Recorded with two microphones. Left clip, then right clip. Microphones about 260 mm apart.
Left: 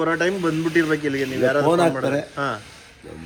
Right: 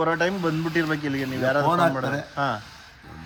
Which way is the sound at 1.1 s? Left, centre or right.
Right.